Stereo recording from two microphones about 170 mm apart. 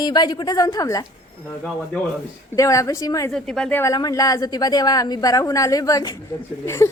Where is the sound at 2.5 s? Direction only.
20° left (ahead or behind).